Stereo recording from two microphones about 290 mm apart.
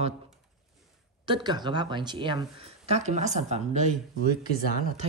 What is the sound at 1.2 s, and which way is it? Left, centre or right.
Speech, centre.